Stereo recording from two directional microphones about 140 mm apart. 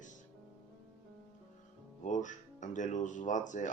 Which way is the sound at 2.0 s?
60° left (ahead or behind).